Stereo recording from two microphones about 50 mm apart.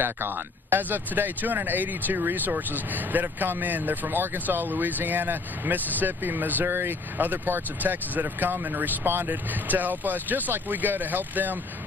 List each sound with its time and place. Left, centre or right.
0.0 s speech: right